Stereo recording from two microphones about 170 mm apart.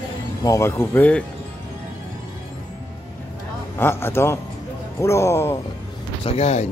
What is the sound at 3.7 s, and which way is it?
Speech, 15° left (ahead or behind).